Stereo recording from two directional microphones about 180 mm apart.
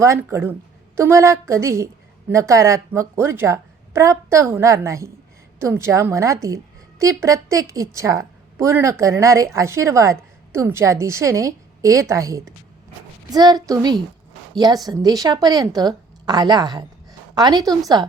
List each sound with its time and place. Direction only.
0.0 s a woman's voice: 15° right (ahead or behind)